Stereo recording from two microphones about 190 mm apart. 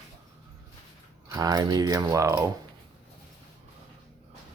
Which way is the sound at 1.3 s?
20° right (ahead or behind).